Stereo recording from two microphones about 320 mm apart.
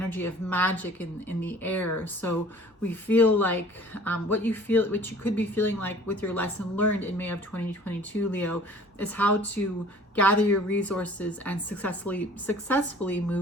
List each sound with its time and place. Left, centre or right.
0.1 s a woman's voice: centre